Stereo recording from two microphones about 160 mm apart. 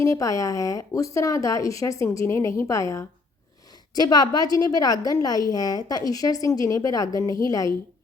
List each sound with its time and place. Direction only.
0.0 s a woman's voice: 20° left (ahead or behind)